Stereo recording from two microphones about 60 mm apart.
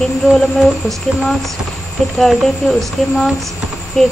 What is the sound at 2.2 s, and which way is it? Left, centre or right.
Speech, centre.